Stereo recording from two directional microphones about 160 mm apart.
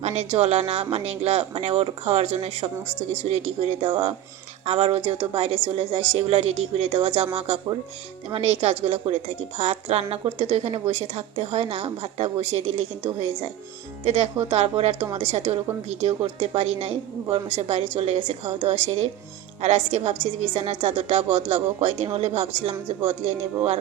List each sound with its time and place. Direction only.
0.0 s a woman's voice: 40° right (ahead or behind)